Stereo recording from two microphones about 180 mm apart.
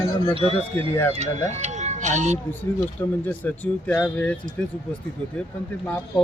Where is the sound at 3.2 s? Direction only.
10° left (ahead or behind).